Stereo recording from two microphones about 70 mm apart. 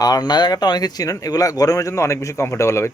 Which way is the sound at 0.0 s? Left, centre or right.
Left.